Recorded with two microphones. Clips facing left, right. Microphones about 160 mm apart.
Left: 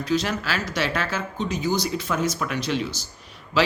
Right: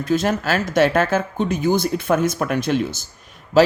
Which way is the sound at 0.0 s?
50° right (ahead or behind).